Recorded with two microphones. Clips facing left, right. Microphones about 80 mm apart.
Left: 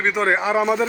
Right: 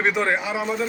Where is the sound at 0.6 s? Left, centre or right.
Left.